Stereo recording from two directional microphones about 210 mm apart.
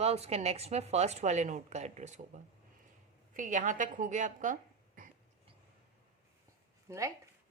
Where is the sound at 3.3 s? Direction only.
35° right (ahead or behind).